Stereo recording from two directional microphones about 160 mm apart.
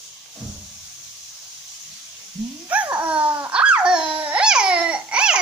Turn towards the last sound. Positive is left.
turn(degrees=-5)  # may be behind; listen again after turning